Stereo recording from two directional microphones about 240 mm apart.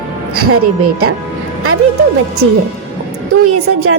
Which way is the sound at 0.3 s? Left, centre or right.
Right.